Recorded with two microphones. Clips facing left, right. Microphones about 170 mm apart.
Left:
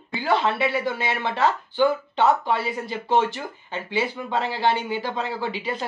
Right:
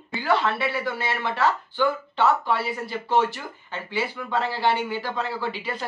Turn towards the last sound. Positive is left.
turn(degrees=20)  # may be behind; listen again after turning